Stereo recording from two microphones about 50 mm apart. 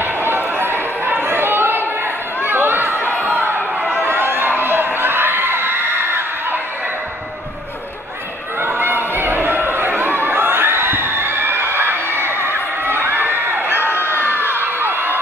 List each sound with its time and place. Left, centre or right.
0.0 s a sound: right
4.0 s crowd: right
8.6 s chatter: right
12.4 s crowd: right
14.3 s crowd: left
14.6 s crowd: right